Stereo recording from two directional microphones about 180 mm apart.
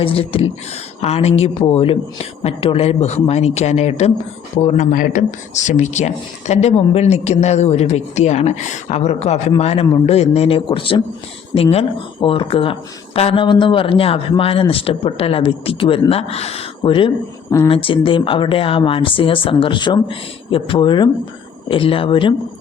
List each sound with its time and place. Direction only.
0.0 s speech: 30° left (ahead or behind)